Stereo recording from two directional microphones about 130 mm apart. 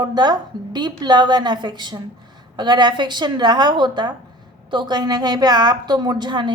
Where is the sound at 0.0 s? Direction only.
30° right (ahead or behind).